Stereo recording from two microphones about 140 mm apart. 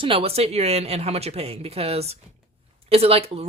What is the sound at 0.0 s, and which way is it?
Speech, 40° right (ahead or behind).